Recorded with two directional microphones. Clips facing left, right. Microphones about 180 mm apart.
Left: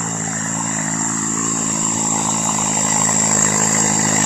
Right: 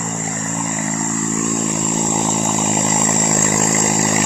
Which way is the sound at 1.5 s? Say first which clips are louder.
Right 3 dB; 20° right (ahead or behind).